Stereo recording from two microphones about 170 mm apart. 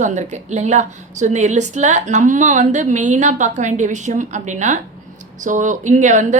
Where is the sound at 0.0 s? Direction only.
45° right (ahead or behind).